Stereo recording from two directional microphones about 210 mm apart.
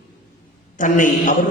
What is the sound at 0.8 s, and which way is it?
Speech, 35° left (ahead or behind).